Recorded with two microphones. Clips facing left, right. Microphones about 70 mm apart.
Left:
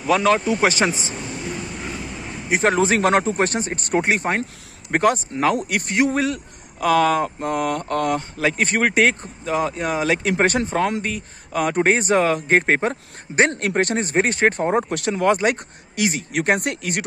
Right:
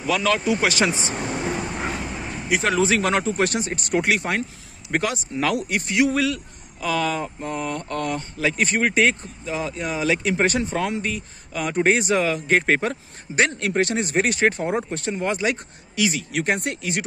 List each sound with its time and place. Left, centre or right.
0.0 s speech: left
1.6 s vehicle: right
2.5 s speech: left
4.9 s speech: left
5.7 s a man's voice: left
5.9 s speech: left
6.8 s speech: left
7.9 s speech: left
13.6 s speech: left
14.9 s speech: left
15.3 s speech: left
16.3 s speech: left